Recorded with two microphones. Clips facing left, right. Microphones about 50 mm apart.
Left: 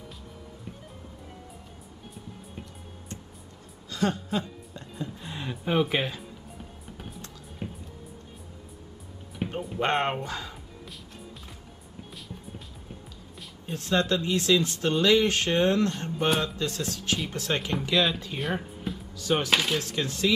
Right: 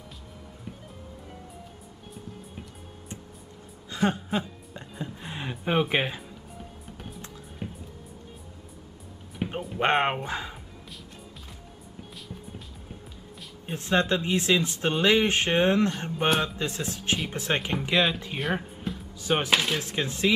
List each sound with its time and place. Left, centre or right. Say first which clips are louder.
3.9 s a sound: right 1 dB; right
7.6 s music: even; centre
9.4 s music: right 1 dB; centre
9.8 s speech: right 2 dB; right
13.7 s speech: right 1 dB; right
16.3 s speech: right 1 dB; centre
16.5 s speech: even; right
18.4 s music: right 2 dB; centre
19.1 s dishes: even; right
19.5 s speech: right 1 dB; centre
19.8 s speech: even; right